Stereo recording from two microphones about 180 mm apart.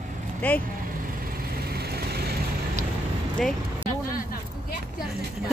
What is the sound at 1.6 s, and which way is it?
Vehicle, 60° right (ahead or behind).